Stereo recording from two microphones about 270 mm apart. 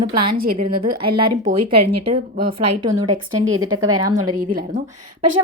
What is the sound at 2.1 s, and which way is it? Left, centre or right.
A woman's voice, centre.